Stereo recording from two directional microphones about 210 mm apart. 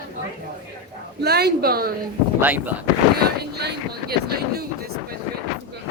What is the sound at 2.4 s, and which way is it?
Speech, 10° right (ahead or behind).